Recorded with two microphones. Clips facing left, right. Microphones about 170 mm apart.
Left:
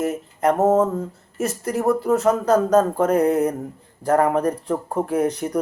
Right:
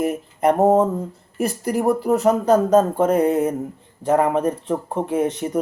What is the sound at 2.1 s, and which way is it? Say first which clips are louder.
Speech: even; 10° right (ahead or behind).